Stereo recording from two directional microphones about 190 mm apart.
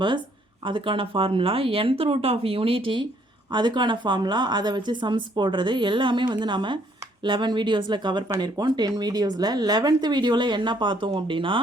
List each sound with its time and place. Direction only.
0.6 s speech: 25° right (ahead or behind)